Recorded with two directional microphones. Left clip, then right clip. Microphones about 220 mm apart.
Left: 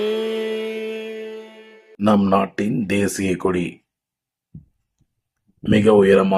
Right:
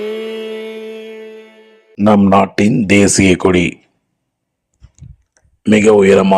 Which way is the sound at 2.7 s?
30° right (ahead or behind).